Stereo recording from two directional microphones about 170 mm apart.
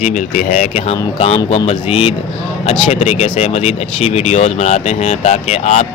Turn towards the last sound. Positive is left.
turn(degrees=40)  # may be behind; listen again after turning